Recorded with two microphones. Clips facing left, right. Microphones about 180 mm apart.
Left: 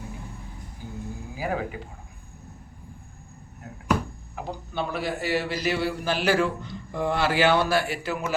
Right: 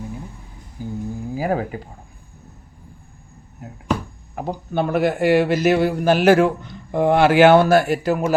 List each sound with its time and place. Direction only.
1.4 s speech: 40° right (ahead or behind)
4.4 s a man's voice: 50° right (ahead or behind)